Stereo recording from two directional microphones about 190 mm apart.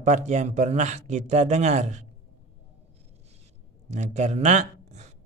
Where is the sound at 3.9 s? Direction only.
40° right (ahead or behind).